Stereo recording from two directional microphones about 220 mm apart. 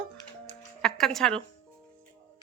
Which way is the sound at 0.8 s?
Centre (ahead or behind).